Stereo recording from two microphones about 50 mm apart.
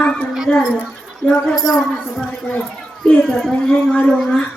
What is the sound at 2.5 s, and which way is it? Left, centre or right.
Speech, left.